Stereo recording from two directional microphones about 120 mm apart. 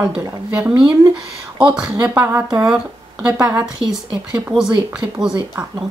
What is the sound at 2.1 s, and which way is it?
Speech, 20° right (ahead or behind).